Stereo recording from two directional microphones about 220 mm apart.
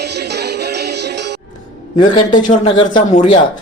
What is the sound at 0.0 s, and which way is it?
Music, 50° right (ahead or behind).